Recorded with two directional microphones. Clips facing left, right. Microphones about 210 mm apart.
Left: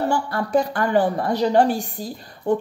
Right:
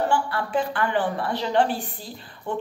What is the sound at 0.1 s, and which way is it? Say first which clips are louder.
A woman's voice: left 4 dB; 40° left (ahead or behind).